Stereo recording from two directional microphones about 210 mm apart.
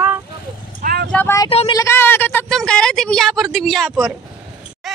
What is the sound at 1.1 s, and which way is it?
A woman's voice, 15° left (ahead or behind).